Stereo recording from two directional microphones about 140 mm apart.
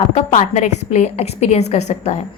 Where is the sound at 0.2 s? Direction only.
55° left (ahead or behind).